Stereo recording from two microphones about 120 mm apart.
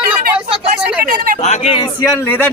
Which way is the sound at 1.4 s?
70° left (ahead or behind).